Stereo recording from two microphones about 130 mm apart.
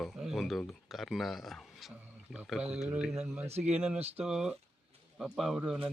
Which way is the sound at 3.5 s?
55° right (ahead or behind).